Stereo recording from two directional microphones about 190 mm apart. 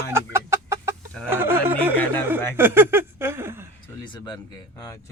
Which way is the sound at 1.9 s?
10° left (ahead or behind).